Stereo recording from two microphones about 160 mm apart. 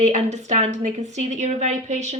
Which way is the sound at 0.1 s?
45° right (ahead or behind).